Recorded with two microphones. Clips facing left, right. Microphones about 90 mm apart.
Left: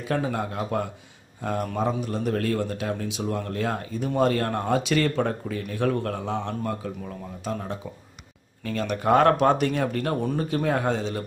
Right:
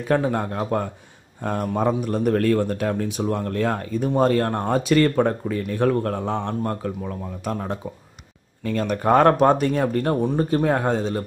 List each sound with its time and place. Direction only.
0.0 s a man's voice: 50° right (ahead or behind)
4.2 s a man's voice: 35° right (ahead or behind); by 7.7 s 55° right (ahead or behind)
8.6 s speech: 40° right (ahead or behind)